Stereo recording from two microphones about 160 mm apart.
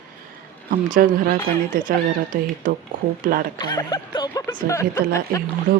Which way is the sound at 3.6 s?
25° left (ahead or behind).